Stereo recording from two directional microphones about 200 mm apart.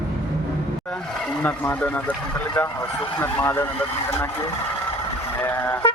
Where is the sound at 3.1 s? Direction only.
10° left (ahead or behind).